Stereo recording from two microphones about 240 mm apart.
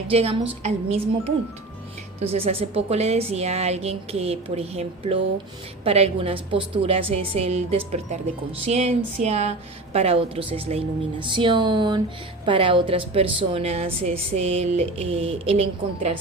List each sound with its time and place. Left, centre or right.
0.1 s a woman's voice: right